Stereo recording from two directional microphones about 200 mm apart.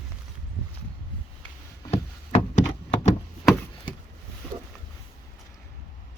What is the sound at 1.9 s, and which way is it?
Wood, 35° left (ahead or behind).